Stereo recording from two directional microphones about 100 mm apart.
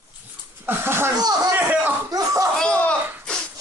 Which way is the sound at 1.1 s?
40° right (ahead or behind).